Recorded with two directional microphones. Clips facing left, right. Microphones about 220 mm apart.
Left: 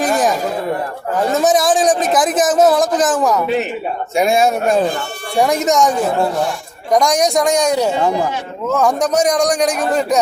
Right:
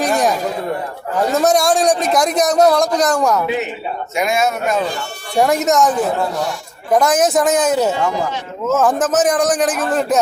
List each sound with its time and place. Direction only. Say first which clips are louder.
0.0 s a sound: left 1 dB; centre (ahead or behind)
1.1 s a man's voice: even; centre (ahead or behind)
4.1 s a man's voice: left 4 dB; 30° left (ahead or behind)
5.4 s a man's voice: even; centre (ahead or behind)